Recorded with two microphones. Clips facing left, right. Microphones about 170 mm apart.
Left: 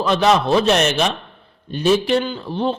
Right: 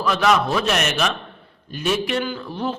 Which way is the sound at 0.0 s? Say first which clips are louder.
Left 3 dB; 30° left (ahead or behind).